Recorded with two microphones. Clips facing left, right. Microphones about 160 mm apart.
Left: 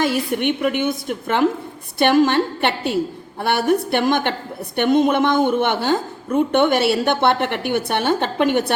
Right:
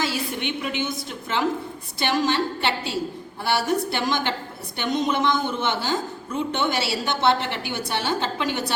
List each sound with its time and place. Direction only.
0.0 s a woman's voice: 55° left (ahead or behind)